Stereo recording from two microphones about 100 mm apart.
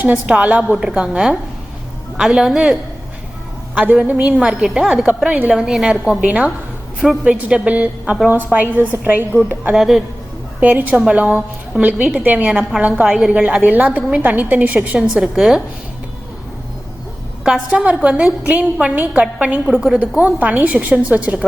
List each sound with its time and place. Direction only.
0.3 s a woman's voice: 10° right (ahead or behind)
4.0 s a woman's voice: 15° right (ahead or behind)
9.7 s a woman's voice: centre (ahead or behind)
10.6 s a woman's voice: 15° right (ahead or behind)
14.9 s a woman's voice: 5° right (ahead or behind)
17.4 s a woman's voice: 5° right (ahead or behind)